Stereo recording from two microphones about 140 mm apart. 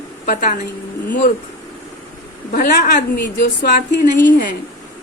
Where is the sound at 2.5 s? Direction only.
80° left.